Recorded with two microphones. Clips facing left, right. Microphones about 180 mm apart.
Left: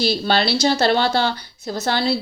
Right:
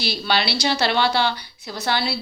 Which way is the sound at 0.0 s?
50° left (ahead or behind).